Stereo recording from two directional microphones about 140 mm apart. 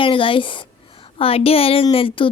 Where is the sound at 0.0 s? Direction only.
40° left (ahead or behind).